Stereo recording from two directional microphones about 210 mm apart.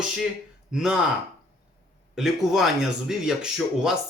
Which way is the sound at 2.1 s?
Centre (ahead or behind).